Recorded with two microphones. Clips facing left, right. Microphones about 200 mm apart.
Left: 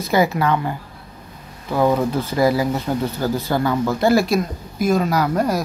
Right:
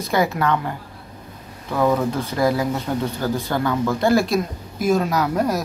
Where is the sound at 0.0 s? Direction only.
5° left (ahead or behind).